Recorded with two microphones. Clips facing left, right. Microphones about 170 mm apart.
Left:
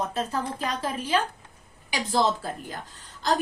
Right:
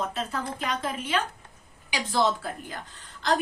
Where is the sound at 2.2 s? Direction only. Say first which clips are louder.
Even; 35° left (ahead or behind).